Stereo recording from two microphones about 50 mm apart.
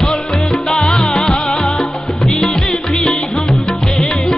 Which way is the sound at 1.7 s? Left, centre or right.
Centre.